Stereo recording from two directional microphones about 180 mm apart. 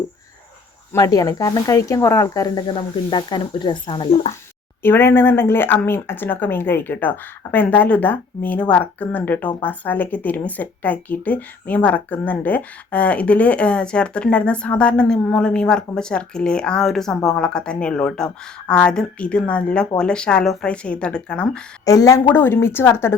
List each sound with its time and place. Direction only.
0.9 s speech: 20° left (ahead or behind)
4.8 s speech: 10° left (ahead or behind)
21.8 s speech: 20° left (ahead or behind)